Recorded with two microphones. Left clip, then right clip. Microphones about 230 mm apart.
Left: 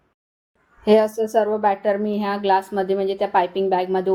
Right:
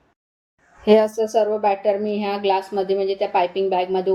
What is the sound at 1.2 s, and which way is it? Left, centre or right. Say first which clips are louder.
A woman's voice: even; left.